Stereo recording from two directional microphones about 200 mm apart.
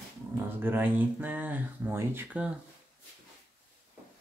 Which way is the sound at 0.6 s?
10° right (ahead or behind).